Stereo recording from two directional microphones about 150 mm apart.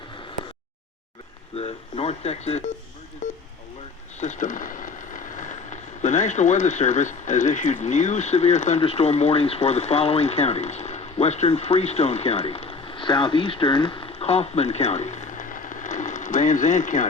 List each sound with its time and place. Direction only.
1.5 s speech: 45° left (ahead or behind)
4.2 s speech: 55° left (ahead or behind)